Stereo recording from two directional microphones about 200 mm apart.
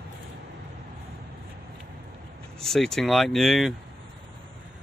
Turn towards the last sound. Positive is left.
turn(degrees=0)  # may be behind; listen again after turning